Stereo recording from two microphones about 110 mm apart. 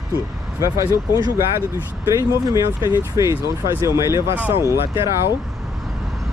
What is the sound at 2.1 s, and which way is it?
Speech, 30° right (ahead or behind).